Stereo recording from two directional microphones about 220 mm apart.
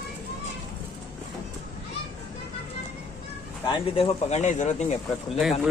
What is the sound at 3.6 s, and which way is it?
Speech, 30° left (ahead or behind).